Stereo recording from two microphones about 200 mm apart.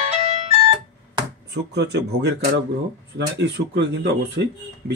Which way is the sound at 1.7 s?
55° right (ahead or behind).